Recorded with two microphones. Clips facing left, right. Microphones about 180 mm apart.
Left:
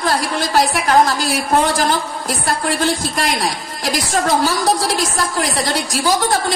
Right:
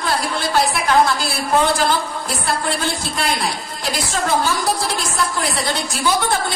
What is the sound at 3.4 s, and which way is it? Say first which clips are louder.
A woman's voice: left 3 dB; 40° left (ahead or behind).